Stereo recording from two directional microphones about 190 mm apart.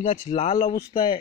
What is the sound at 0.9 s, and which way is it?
Speech, 25° left (ahead or behind).